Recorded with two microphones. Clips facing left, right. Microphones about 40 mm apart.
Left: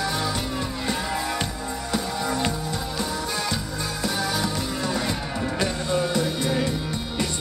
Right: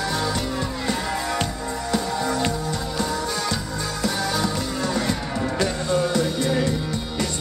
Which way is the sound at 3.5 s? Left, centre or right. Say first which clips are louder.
Right 2 dB; centre.